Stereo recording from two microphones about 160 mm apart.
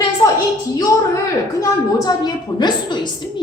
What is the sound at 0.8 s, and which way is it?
A woman's voice, 20° left (ahead or behind).